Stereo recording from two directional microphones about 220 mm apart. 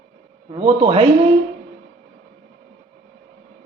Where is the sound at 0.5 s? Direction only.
25° right (ahead or behind).